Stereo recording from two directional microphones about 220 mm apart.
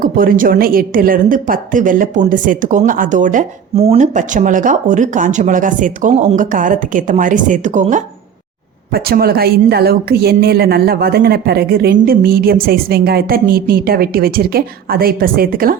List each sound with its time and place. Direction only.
0.0 s a woman's voice: 40° right (ahead or behind)
8.9 s a woman's voice: 45° right (ahead or behind)